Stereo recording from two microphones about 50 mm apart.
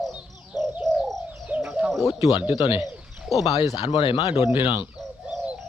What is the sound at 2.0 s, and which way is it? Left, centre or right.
Speech, right.